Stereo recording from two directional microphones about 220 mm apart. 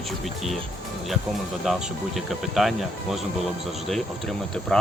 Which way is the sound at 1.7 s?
Centre (ahead or behind).